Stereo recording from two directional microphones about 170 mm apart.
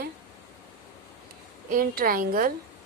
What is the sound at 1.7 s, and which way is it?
Speech, 60° right (ahead or behind).